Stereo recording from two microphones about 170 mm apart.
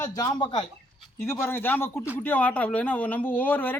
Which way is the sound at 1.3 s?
10° left (ahead or behind).